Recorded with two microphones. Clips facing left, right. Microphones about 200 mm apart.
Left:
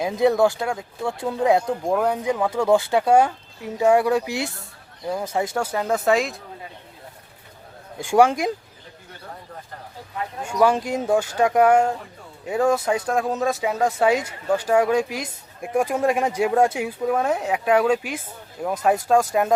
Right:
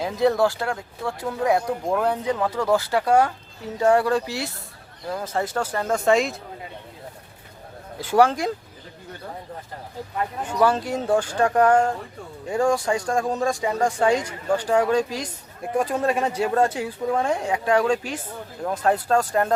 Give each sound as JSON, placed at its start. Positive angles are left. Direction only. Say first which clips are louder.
{"t": 0.0, "sound": "speech", "louder": "left 2 dB", "side_deg": 15}
{"t": 1.9, "sound": "speech", "louder": "left 1 dB", "side_deg": 10}
{"t": 2.6, "sound": "speech", "louder": "left 3 dB", "side_deg": 25}
{"t": 7.9, "sound": "speech", "louder": "left 1 dB", "side_deg": 15}
{"t": 10.4, "sound": "speech", "louder": "left 2 dB", "side_deg": 10}